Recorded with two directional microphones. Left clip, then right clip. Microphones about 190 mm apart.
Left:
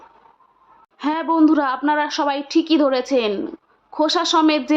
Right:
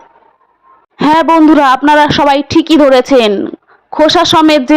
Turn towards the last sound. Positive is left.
turn(degrees=-40)  # may be behind; listen again after turning